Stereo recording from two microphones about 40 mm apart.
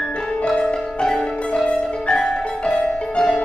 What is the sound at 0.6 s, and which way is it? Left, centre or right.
Music, centre.